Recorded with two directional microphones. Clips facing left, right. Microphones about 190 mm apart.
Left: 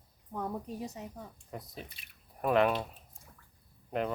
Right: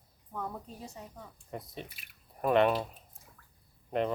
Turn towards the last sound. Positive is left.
turn(degrees=0)  # may be behind; listen again after turning